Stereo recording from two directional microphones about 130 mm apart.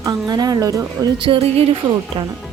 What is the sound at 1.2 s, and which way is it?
Speech, 40° right (ahead or behind).